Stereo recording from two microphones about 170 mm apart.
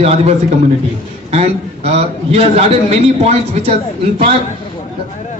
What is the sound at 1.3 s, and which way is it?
A man's voice, 40° right (ahead or behind).